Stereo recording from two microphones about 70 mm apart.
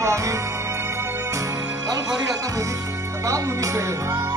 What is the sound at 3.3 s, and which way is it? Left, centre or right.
Music, right.